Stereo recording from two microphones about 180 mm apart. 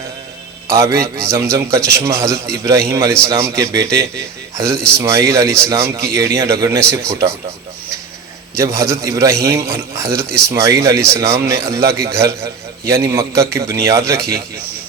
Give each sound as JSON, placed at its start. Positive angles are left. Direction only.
{"t": 0.7, "sound": "a man's voice", "side_deg": -15}
{"t": 8.5, "sound": "a man's voice", "side_deg": -15}